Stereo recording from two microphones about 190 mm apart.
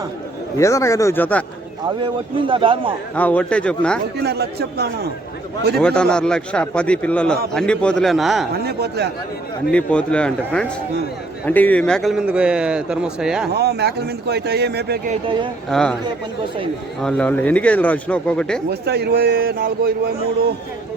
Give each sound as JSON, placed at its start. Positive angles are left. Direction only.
{"t": 0.6, "sound": "speech", "side_deg": 15}
{"t": 2.5, "sound": "a man's voice", "side_deg": -25}
{"t": 3.2, "sound": "speech", "side_deg": 5}
{"t": 4.2, "sound": "a man's voice", "side_deg": -60}
{"t": 5.8, "sound": "a man's voice", "side_deg": 5}
{"t": 8.6, "sound": "a man's voice", "side_deg": -60}
{"t": 9.7, "sound": "a man's voice", "side_deg": 5}
{"t": 13.5, "sound": "a man's voice", "side_deg": -60}
{"t": 15.1, "sound": "a man's voice", "side_deg": -25}
{"t": 15.7, "sound": "a man's voice", "side_deg": 5}
{"t": 17.0, "sound": "speech", "side_deg": 5}
{"t": 18.7, "sound": "a man's voice", "side_deg": -60}